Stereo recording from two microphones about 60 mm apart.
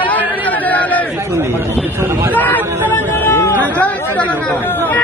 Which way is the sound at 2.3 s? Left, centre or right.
Left.